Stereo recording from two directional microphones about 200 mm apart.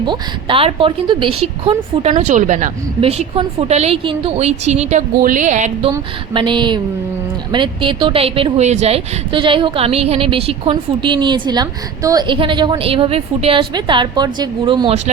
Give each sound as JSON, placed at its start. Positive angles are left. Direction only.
{"t": 0.0, "sound": "a woman's voice", "side_deg": -25}
{"t": 5.9, "sound": "a woman's voice", "side_deg": -25}